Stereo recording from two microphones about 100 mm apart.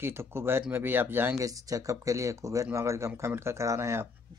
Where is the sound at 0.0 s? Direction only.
25° right (ahead or behind).